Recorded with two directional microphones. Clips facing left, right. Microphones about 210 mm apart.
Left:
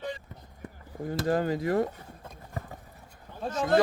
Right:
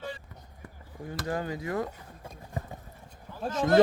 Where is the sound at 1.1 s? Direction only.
35° left (ahead or behind).